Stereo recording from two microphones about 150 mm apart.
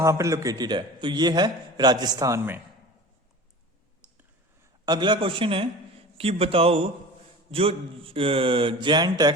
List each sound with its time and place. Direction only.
0.0 s a man's voice: 20° right (ahead or behind)
4.0 s clicking: 10° right (ahead or behind)
4.9 s speech: 30° right (ahead or behind)